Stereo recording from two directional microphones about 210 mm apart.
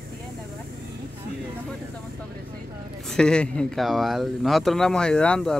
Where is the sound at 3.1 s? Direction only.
5° left (ahead or behind).